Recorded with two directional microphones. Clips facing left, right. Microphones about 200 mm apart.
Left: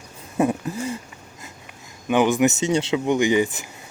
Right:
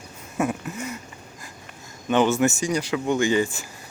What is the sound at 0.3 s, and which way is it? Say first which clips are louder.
Dog: left 4 dB; 30° left (ahead or behind).